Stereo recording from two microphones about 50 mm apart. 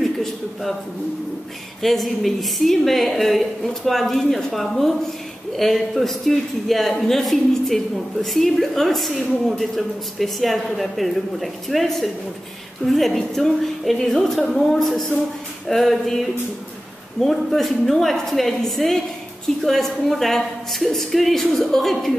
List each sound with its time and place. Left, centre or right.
0.0 s a man's voice: centre
1.8 s a man's voice: centre